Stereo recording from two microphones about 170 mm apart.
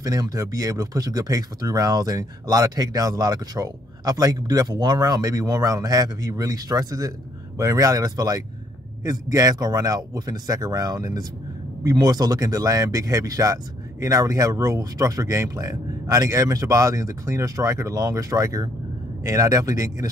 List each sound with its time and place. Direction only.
0.0 s speech: 20° right (ahead or behind)